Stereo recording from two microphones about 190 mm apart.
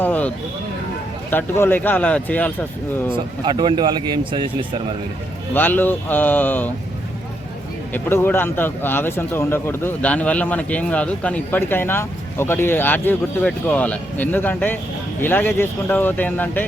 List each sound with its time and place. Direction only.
0.0 s a sound: 10° left (ahead or behind)
1.3 s speech: 10° left (ahead or behind)
3.4 s speech: 25° right (ahead or behind)
5.5 s speech: 10° left (ahead or behind)
7.9 s speech: 10° left (ahead or behind)